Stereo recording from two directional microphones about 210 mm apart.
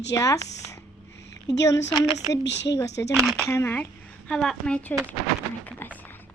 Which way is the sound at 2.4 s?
55° left (ahead or behind).